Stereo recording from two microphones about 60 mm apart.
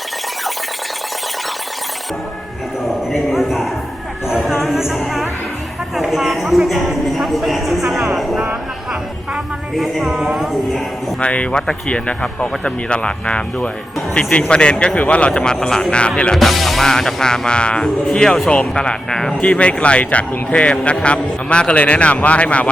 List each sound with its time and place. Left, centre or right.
3.1 s speech: centre
6.0 s speech: centre
9.7 s speech: centre
11.2 s speech: left
16.3 s speech: centre; by 22.7 s left